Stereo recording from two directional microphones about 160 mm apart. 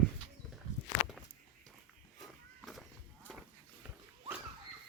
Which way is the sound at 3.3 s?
Centre (ahead or behind).